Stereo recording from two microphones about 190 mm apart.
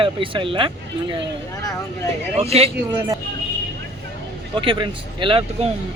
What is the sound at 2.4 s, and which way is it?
Speech, 35° right (ahead or behind).